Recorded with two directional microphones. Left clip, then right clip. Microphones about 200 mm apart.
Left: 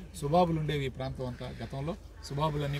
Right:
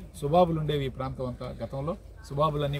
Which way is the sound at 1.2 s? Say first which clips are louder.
Right 5 dB; 10° left (ahead or behind).